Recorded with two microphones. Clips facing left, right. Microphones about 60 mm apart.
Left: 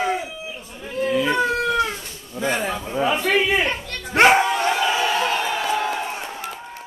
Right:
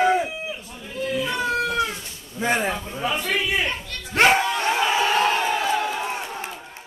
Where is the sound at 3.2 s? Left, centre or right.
Left.